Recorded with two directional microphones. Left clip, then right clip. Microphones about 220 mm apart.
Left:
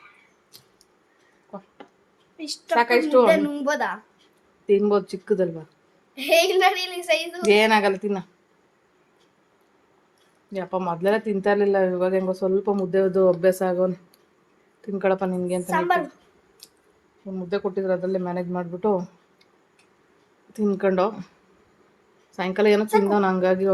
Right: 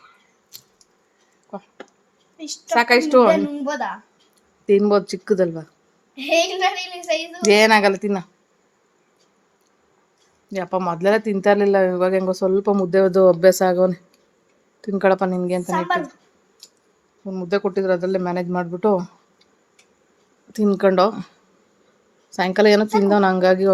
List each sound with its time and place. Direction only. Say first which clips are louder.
1.8 s bee: right 5 dB; 50° right (ahead or behind)
2.4 s a woman's voice: right 1 dB; 10° left (ahead or behind)
2.7 s speech: right 3 dB; 30° right (ahead or behind)
3.2 s a child's voice: right 2 dB; 20° left (ahead or behind)
4.6 s speech: right 4 dB; 30° right (ahead or behind)
6.1 s a child's voice: left 1 dB; 25° left (ahead or behind)
7.4 s speech: right 5 dB; 30° right (ahead or behind)
10.5 s speech: right 4 dB; 30° right (ahead or behind)
15.7 s a woman's voice: left 1 dB; 15° left (ahead or behind)
16.6 s a sound: right 3 dB; 15° left (ahead or behind)
17.2 s speech: right 5 dB; 40° right (ahead or behind)
20.5 s speech: right 5 dB; 25° right (ahead or behind)
22.3 s speech: right 5 dB; 25° right (ahead or behind)